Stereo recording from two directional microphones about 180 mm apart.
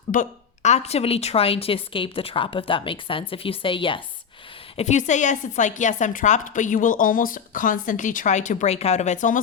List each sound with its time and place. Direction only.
0.1 s a woman's voice: 45° left (ahead or behind)
4.8 s a woman's voice: 40° left (ahead or behind)